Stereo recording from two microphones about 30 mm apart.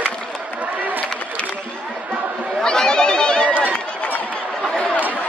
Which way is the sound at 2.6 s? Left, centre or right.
Left.